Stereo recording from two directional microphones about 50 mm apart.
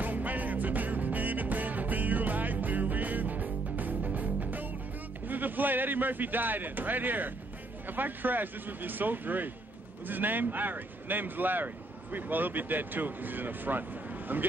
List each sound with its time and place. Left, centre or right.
0.0 s music: right
5.3 s speech: right